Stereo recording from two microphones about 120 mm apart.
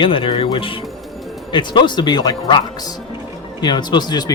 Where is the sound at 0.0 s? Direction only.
45° left (ahead or behind).